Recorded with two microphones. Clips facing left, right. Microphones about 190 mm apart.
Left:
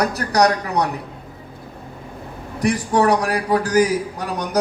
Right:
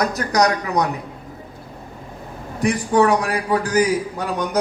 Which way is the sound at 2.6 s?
40° left (ahead or behind).